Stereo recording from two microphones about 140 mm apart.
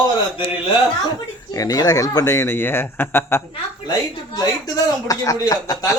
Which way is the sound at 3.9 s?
30° left (ahead or behind).